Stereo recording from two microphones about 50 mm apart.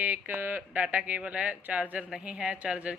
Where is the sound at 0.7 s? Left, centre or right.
Right.